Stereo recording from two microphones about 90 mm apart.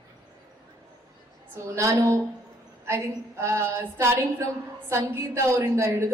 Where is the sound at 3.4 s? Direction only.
30° right (ahead or behind).